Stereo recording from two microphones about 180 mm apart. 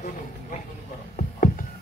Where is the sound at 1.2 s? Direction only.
50° left (ahead or behind).